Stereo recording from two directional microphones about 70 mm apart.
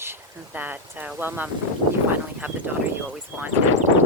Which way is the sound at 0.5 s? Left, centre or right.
Right.